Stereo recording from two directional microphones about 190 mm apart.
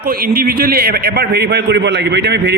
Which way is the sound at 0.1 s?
50° right (ahead or behind).